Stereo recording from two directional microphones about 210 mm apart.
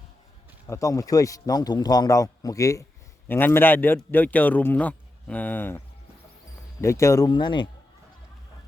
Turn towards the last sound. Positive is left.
turn(degrees=20)  # may be behind; listen again after turning